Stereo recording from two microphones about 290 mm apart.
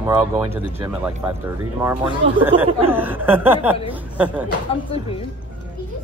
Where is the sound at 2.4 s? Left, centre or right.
Centre.